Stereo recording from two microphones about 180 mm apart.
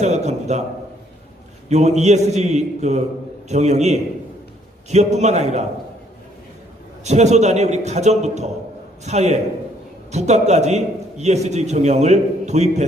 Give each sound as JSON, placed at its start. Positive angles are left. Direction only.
{"t": 0.0, "sound": "a man's voice", "side_deg": -40}
{"t": 1.7, "sound": "a man's voice", "side_deg": -40}
{"t": 7.0, "sound": "a man's voice", "side_deg": -40}